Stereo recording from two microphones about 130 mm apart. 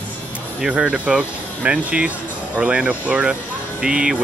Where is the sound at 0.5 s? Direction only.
10° right (ahead or behind).